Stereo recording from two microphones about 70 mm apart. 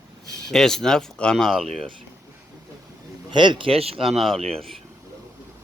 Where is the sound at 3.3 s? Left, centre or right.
Right.